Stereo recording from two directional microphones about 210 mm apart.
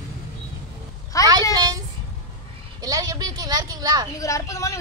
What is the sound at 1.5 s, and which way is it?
Child singing, 20° right (ahead or behind).